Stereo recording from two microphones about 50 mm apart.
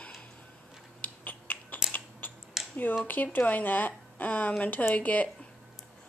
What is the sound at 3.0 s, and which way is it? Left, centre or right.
Speech, left.